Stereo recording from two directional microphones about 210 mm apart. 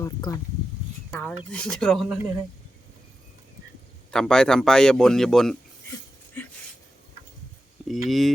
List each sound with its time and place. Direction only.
0.0 s speech: 15° left (ahead or behind)
1.1 s speech: 5° left (ahead or behind)
4.1 s speech: 5° left (ahead or behind)
6.4 s a sound: 10° left (ahead or behind)
7.9 s speech: centre (ahead or behind)